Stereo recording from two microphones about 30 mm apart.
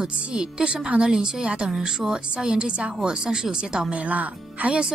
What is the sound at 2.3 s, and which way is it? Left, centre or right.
A woman's voice, right.